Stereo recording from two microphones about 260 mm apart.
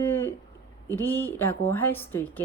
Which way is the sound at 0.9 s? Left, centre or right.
Centre.